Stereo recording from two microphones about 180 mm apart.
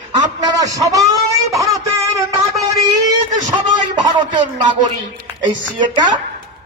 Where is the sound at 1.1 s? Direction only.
20° right (ahead or behind).